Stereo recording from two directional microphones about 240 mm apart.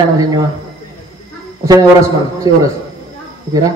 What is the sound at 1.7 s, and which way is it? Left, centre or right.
A man's voice, centre.